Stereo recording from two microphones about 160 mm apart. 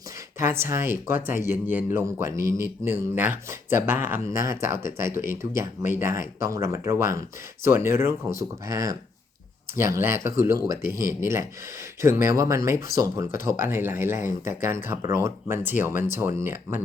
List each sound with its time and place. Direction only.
0.3 s speech: 15° right (ahead or behind)